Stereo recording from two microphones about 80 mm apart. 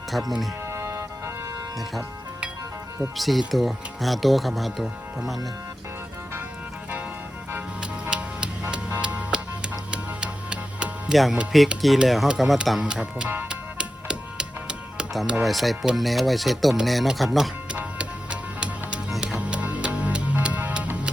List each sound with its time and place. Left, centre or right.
0.1 s speech: centre
0.7 s music: right
3.2 s speech: centre
7.8 s music: centre
11.5 s speech: centre
12.8 s speech: centre
13.5 s music: centre
15.3 s speech: centre
17.7 s music: centre